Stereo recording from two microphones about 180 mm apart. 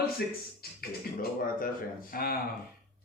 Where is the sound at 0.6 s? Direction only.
55° left (ahead or behind).